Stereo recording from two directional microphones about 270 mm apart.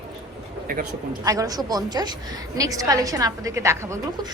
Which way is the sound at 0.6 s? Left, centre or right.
Right.